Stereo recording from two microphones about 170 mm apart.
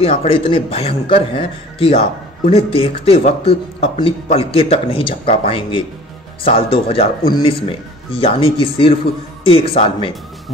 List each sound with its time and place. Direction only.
0.0 s speech: 35° left (ahead or behind)